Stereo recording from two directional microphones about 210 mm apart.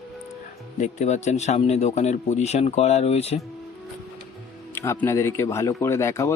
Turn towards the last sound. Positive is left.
turn(degrees=15)  # may be behind; listen again after turning